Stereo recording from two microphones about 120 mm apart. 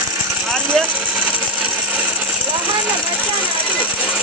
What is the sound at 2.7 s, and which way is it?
Ratchet, 15° right (ahead or behind).